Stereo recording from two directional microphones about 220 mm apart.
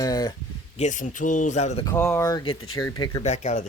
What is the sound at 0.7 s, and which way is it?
Speech, 35° left (ahead or behind).